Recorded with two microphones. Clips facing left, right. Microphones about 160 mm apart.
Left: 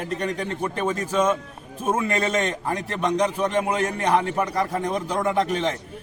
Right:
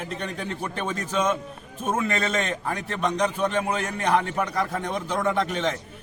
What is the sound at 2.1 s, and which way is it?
Speech, 35° left (ahead or behind).